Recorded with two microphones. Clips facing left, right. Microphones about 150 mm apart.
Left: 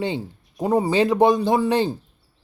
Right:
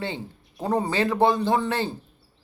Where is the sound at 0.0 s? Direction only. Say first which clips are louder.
Left 6 dB; 15° left (ahead or behind).